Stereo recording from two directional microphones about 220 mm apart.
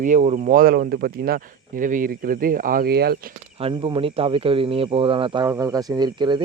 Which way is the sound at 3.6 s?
20° right (ahead or behind).